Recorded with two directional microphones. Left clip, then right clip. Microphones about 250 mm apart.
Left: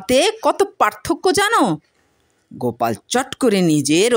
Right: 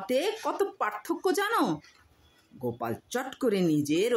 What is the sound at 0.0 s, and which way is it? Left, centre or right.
Speech, left.